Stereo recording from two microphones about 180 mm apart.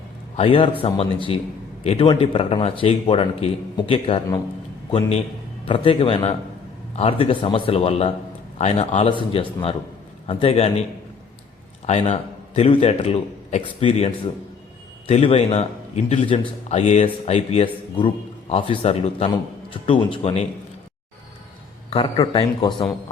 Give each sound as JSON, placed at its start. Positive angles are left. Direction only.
{"t": 0.3, "sound": "a man's voice", "side_deg": 30}
{"t": 11.9, "sound": "a man's voice", "side_deg": 40}
{"t": 21.8, "sound": "a man's voice", "side_deg": 30}